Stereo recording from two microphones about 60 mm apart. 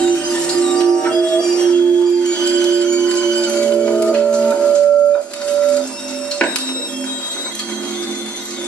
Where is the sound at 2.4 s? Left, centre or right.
Centre.